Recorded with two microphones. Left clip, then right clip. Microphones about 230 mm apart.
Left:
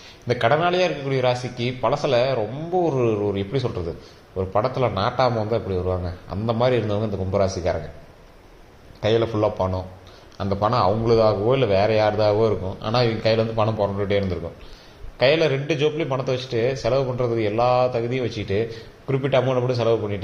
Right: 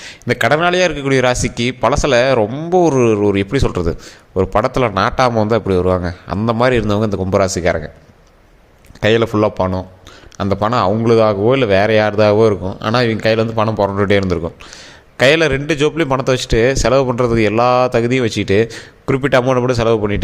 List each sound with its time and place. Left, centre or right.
0.3 s a man's voice: right
9.0 s a man's voice: right